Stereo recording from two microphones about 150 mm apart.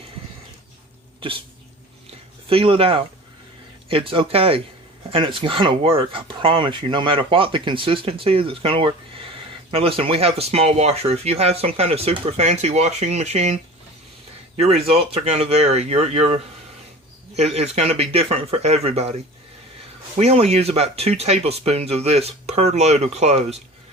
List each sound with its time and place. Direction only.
2.5 s speech: 35° right (ahead or behind)
20.1 s speech: 45° right (ahead or behind)